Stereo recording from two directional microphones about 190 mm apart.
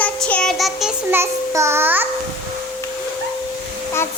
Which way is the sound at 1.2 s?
15° right (ahead or behind).